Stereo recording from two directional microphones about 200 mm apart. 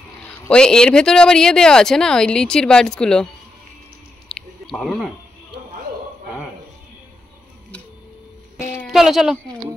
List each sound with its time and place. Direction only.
0.5 s speech: 5° left (ahead or behind)
4.3 s chewing: 5° left (ahead or behind)
8.8 s a woman's voice: centre (ahead or behind)